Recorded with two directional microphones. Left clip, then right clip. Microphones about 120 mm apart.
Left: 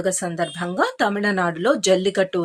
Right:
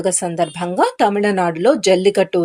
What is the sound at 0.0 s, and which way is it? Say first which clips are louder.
Speech: right 5 dB; 20° right (ahead or behind).